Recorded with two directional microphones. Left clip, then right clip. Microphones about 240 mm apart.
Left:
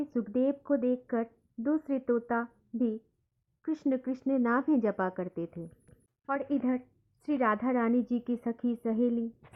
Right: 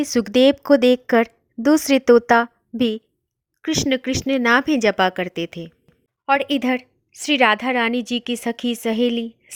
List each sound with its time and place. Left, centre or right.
0.0 s a woman's voice: right